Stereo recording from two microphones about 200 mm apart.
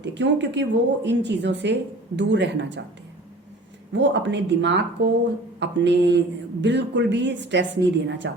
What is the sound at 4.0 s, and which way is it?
A woman's voice, 65° right (ahead or behind).